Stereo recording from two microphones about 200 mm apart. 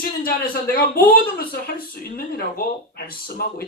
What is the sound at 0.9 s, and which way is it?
Speech, 45° left (ahead or behind).